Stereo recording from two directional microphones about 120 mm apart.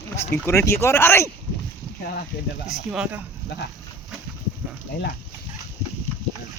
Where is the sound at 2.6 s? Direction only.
5° right (ahead or behind).